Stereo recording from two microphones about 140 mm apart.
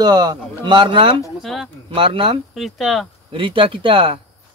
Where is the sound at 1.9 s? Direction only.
40° right (ahead or behind).